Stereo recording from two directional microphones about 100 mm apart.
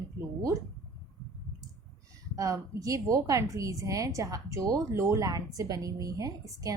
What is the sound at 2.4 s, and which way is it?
A woman's voice, 35° right (ahead or behind).